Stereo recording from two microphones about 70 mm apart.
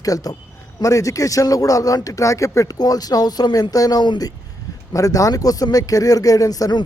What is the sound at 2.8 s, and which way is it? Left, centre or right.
Speech, left.